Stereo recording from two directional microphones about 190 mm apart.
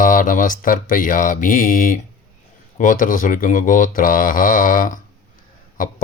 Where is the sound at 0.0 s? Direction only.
45° left (ahead or behind).